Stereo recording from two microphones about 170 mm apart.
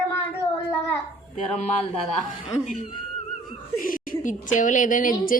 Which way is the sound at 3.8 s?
50° left (ahead or behind).